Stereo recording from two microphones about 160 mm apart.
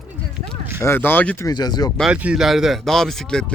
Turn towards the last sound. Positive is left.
turn(degrees=5)  # may be behind; listen again after turning